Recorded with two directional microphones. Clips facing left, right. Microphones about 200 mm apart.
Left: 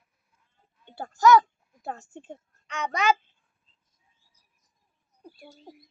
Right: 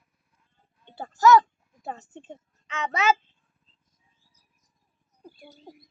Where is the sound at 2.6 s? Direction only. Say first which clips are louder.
Right 1 dB; centre (ahead or behind).